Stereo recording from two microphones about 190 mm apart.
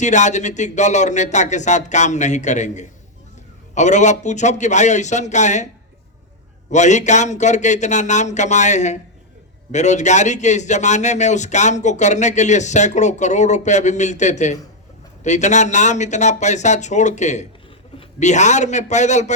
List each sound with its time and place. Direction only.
0.0 s a man's voice: 40° left (ahead or behind)
6.7 s a man's voice: 40° left (ahead or behind)